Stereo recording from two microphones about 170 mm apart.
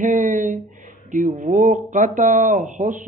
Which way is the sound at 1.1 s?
50° right (ahead or behind).